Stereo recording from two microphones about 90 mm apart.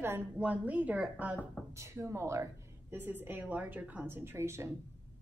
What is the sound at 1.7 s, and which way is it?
A woman's voice, 35° right (ahead or behind).